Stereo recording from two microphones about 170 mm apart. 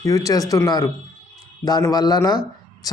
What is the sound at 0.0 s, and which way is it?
Speech, 20° left (ahead or behind).